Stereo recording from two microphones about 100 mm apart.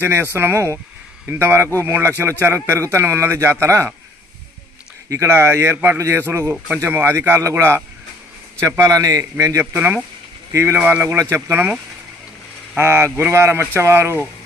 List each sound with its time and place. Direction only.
0.0 s speech: 25° right (ahead or behind)
5.0 s speech: 30° right (ahead or behind)
8.9 s a man's voice: 35° right (ahead or behind)
9.7 s speech: 20° right (ahead or behind)
10.8 s speech: 15° right (ahead or behind)